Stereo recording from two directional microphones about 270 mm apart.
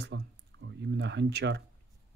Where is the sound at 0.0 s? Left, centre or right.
Right.